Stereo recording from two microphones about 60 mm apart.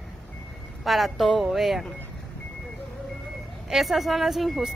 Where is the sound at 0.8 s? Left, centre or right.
Centre.